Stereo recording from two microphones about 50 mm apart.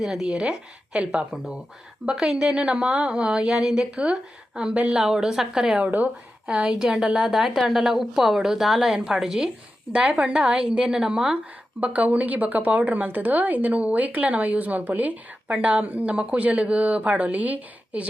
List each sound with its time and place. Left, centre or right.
0.0 s a woman's voice: centre
0.9 s speech: right
2.0 s a woman's voice: centre
5.8 s speech: right
6.5 s a woman's voice: centre
11.8 s a woman's voice: right